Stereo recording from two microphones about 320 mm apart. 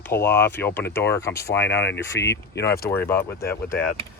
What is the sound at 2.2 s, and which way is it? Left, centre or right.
Speech, left.